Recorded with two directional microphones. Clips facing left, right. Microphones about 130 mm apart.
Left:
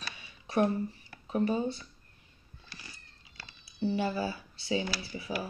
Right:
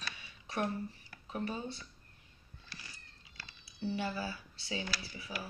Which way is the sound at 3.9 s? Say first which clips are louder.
Left 5 dB; 20° left (ahead or behind).